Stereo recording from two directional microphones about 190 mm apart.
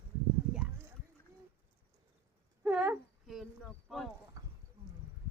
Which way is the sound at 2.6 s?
5° right (ahead or behind).